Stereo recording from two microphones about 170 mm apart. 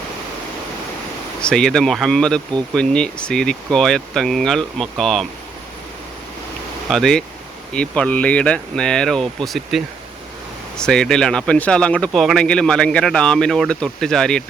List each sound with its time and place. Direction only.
1.4 s speech: 5° left (ahead or behind)
6.9 s speech: 5° left (ahead or behind)